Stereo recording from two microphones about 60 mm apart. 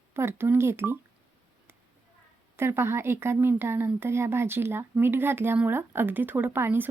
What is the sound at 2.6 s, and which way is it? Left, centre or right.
A woman's voice, right.